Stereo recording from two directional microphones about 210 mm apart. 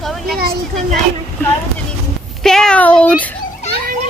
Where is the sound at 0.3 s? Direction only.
45° right (ahead or behind).